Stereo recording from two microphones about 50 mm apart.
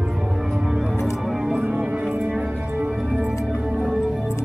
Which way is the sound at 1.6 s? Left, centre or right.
Right.